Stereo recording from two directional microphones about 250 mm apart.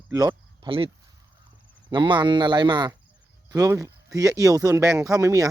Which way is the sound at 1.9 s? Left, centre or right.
Centre.